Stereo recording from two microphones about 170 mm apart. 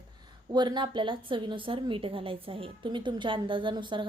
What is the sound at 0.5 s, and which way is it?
A woman's voice, 25° right (ahead or behind).